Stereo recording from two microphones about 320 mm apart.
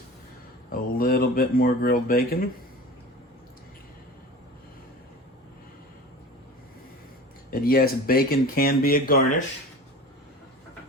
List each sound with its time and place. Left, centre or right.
0.7 s speech: left
7.5 s speech: left